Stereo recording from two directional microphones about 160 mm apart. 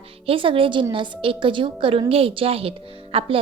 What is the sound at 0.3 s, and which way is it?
A woman's voice, 35° right (ahead or behind).